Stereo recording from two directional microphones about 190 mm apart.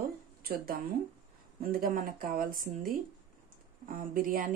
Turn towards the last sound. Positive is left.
turn(degrees=-50)  # may be behind; listen again after turning